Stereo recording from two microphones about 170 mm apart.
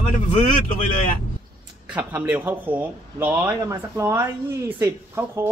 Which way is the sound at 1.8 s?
10° right (ahead or behind).